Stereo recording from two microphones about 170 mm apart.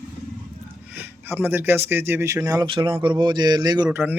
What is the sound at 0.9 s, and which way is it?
Speech, 10° right (ahead or behind).